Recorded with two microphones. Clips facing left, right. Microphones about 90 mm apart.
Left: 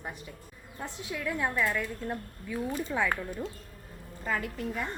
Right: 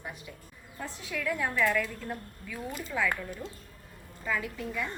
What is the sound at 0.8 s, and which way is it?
A woman's voice, 20° left (ahead or behind).